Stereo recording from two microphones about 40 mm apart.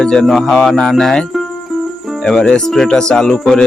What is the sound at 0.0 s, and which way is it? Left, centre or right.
Speech, left.